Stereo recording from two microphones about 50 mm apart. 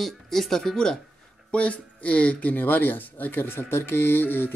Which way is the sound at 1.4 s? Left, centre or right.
Left.